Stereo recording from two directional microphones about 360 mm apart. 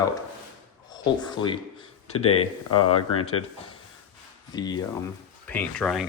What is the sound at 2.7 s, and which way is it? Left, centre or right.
Speech, left.